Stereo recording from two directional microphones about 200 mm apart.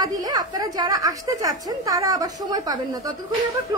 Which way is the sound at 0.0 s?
20° right (ahead or behind).